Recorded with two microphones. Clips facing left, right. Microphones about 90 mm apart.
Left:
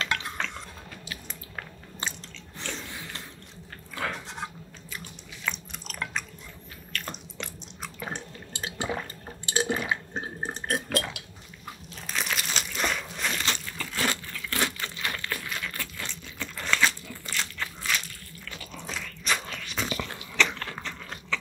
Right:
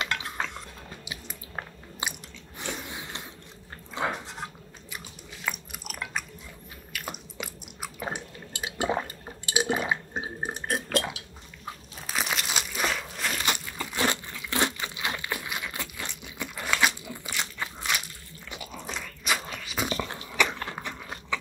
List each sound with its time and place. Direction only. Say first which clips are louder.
0.0 s dishes: even; 10° right (ahead or behind)
2.0 s biting: right 1 dB; 15° right (ahead or behind)
2.6 s a sound: right 2 dB; 15° right (ahead or behind)
4.9 s chewing: even; 10° right (ahead or behind)
8.1 s drip: right 1 dB; 15° right (ahead or behind)
9.2 s water: even; 10° right (ahead or behind)
9.7 s water: right 3 dB; 20° right (ahead or behind)
10.1 s burping: right 1 dB; 10° right (ahead or behind)
12.1 s crunch: right 1 dB; 10° right (ahead or behind)
12.4 s a sound: even; 10° right (ahead or behind)
13.4 s crumpling: right 2 dB; 15° right (ahead or behind)
20.3 s biting: even; 15° right (ahead or behind)